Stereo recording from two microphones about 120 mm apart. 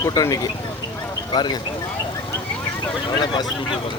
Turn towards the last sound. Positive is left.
turn(degrees=35)  # may be behind; listen again after turning